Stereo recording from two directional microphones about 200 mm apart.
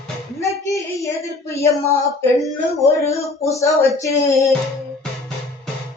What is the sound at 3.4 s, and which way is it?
Speech, 15° left (ahead or behind).